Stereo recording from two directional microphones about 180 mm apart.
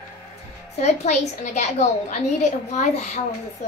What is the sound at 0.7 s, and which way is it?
A woman's voice, 40° left (ahead or behind).